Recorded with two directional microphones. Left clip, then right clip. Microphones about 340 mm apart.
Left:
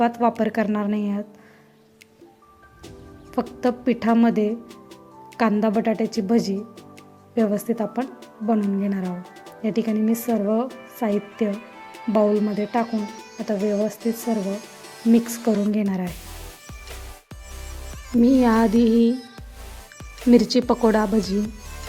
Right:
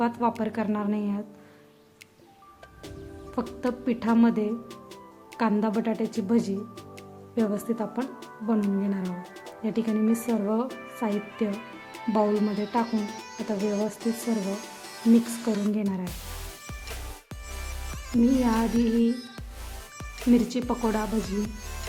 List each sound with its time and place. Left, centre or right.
0.0 s a woman's voice: centre
3.3 s a woman's voice: centre
15.7 s a woman's voice: centre
18.1 s music: centre
18.8 s speech: centre
20.3 s a woman's voice: centre
21.2 s music: centre